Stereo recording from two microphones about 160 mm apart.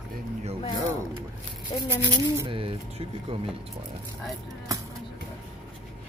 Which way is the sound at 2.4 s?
35° right (ahead or behind).